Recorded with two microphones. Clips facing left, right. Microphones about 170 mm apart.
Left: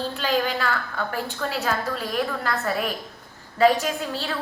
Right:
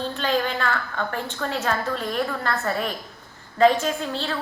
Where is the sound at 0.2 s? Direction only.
10° left (ahead or behind).